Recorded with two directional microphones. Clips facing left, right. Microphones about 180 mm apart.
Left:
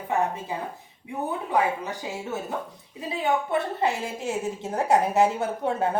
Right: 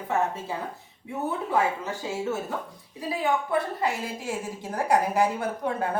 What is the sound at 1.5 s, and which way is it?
A woman's voice, 15° left (ahead or behind).